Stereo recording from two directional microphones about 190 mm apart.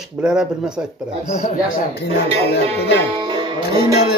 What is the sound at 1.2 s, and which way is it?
Speech, 35° left (ahead or behind).